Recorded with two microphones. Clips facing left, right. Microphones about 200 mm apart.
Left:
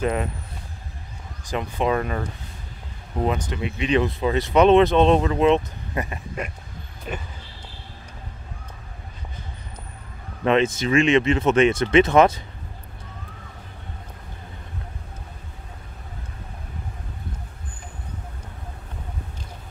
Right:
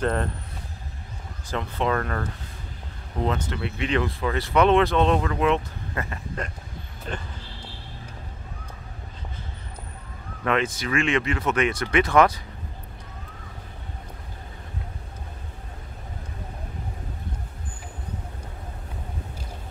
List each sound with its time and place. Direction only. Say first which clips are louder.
0.0 s speech: left 1 dB; 10° left (ahead or behind)
1.4 s speech: left 2 dB; 15° left (ahead or behind)
3.3 s speech: left 2 dB; 15° left (ahead or behind)
10.4 s speech: left 5 dB; 25° left (ahead or behind)